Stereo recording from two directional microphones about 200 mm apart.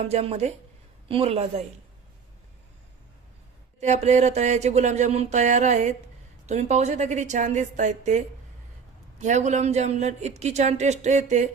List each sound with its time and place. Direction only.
0.0 s a man's voice: 30° right (ahead or behind)
3.8 s speech: 35° right (ahead or behind)